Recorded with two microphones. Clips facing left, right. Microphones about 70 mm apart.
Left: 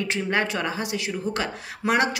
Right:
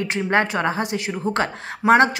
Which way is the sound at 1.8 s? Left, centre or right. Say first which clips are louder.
Right 8 dB; centre.